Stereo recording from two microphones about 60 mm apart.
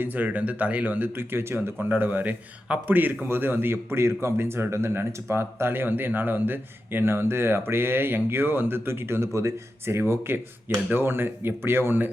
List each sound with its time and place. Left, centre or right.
0.0 s speech: right